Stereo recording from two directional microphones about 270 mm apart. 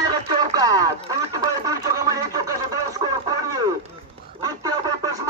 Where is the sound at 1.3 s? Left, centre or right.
Centre.